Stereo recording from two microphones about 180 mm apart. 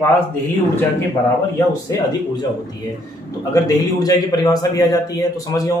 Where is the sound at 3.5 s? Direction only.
20° left (ahead or behind).